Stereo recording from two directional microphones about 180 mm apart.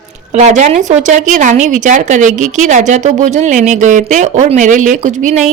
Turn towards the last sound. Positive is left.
turn(degrees=-40)  # may be behind; listen again after turning